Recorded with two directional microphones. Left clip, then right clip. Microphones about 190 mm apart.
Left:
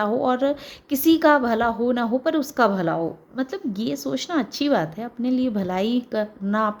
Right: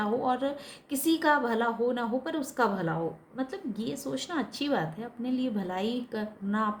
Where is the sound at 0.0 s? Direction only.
45° left (ahead or behind).